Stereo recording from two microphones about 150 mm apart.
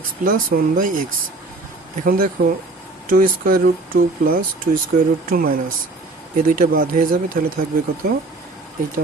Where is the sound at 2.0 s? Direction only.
75° right (ahead or behind).